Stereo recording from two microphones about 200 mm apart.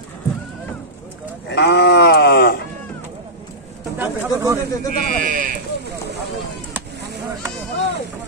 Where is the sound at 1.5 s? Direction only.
55° left (ahead or behind).